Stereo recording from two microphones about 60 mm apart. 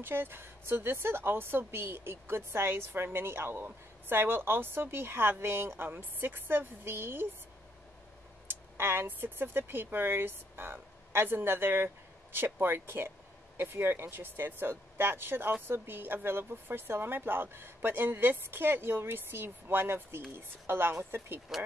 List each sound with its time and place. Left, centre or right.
0.0 s a woman's voice: right
8.5 s a woman's voice: right